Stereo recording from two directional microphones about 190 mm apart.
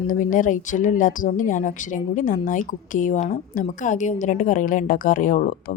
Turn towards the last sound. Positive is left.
turn(degrees=45)  # may be behind; listen again after turning